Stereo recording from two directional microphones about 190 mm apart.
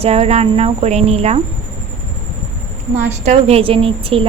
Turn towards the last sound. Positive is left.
turn(degrees=-30)  # may be behind; listen again after turning